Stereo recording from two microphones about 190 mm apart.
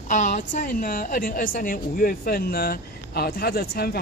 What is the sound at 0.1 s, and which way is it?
A woman's voice, 40° left (ahead or behind).